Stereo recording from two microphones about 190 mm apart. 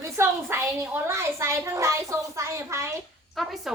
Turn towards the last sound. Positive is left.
turn(degrees=0)  # may be behind; listen again after turning